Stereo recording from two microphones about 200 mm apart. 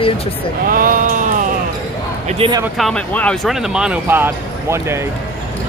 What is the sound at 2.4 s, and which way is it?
Speech, 30° right (ahead or behind).